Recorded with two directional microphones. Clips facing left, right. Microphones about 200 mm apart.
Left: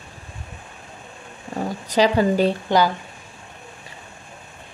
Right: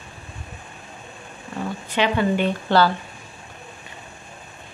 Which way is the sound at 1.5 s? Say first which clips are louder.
Left 4 dB; 40° left (ahead or behind).